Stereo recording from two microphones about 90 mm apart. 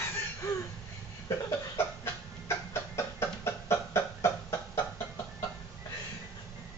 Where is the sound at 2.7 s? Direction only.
30° left (ahead or behind).